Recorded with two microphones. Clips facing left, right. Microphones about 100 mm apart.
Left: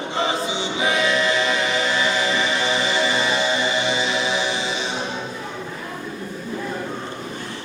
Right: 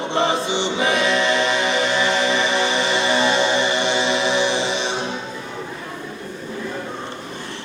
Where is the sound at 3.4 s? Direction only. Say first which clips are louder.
Right 2 dB; 70° right (ahead or behind).